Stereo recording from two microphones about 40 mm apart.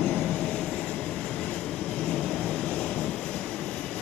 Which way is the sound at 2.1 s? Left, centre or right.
Centre.